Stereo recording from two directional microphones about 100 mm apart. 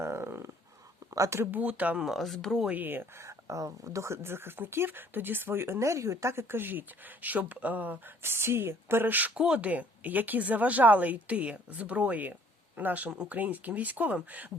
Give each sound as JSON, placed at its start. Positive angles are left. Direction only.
{"t": 0.0, "sound": "a sound", "side_deg": -25}
{"t": 1.1, "sound": "speech", "side_deg": -30}
{"t": 2.0, "sound": "speech", "side_deg": 0}
{"t": 2.6, "sound": "speech", "side_deg": -20}